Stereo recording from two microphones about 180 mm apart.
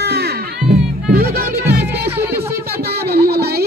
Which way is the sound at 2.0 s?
10° right (ahead or behind).